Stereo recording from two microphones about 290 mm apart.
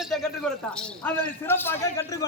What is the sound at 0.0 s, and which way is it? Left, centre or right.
A man's voice, centre.